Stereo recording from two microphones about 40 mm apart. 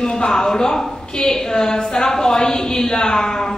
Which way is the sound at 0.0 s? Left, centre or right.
Centre.